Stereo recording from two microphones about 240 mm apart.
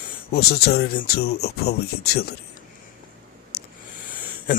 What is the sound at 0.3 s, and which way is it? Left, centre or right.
Speech, left.